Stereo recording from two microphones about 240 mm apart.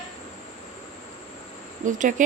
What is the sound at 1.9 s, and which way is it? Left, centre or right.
Speech, right.